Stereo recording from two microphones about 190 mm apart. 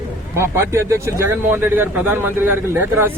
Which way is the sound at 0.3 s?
15° right (ahead or behind).